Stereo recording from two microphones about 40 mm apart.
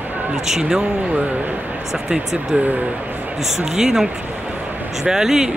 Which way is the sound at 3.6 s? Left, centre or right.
Centre.